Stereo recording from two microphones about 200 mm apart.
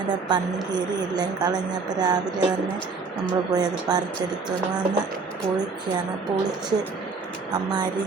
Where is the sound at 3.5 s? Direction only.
20° right (ahead or behind).